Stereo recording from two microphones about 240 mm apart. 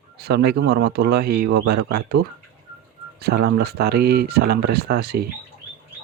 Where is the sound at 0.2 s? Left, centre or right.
Right.